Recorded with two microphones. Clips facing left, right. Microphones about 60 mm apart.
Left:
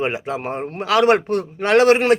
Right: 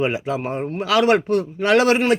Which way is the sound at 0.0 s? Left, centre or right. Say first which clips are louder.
Right 1 dB; left.